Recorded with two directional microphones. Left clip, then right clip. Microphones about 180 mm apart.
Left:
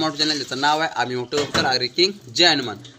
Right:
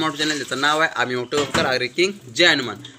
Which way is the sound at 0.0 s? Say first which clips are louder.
Even; 5° left (ahead or behind).